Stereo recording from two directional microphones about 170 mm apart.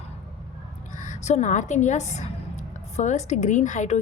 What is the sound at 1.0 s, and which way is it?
A woman's voice, 45° left (ahead or behind).